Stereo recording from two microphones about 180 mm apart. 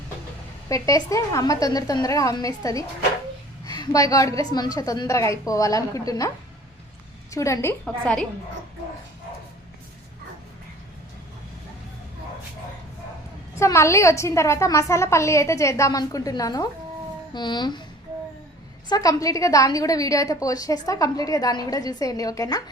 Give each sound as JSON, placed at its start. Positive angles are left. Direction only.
{"t": 0.7, "sound": "a woman's voice", "side_deg": 15}
{"t": 13.6, "sound": "a woman's voice", "side_deg": 15}
{"t": 18.9, "sound": "a woman's voice", "side_deg": 20}